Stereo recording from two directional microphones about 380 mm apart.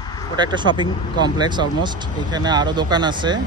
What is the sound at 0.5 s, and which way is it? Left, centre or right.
Speech, centre.